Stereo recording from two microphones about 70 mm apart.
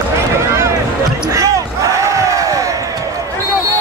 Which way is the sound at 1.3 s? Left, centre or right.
Right.